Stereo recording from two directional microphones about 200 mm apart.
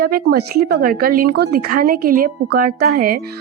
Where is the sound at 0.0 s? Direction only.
50° right (ahead or behind).